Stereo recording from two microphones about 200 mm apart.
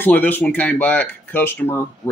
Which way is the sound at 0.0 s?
10° left (ahead or behind).